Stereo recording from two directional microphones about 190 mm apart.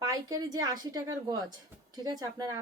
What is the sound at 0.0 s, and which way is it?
A woman's voice, 20° right (ahead or behind).